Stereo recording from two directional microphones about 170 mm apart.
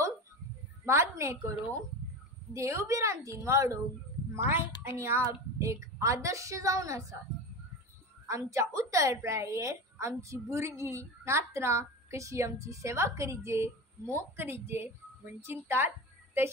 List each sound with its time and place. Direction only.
0.8 s a woman's voice: 15° right (ahead or behind)
2.5 s a woman's voice: 15° right (ahead or behind)
8.3 s a woman's voice: 20° right (ahead or behind)